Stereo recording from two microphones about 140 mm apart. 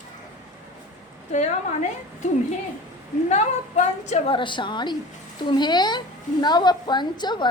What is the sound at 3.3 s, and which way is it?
A woman's voice, 55° left (ahead or behind).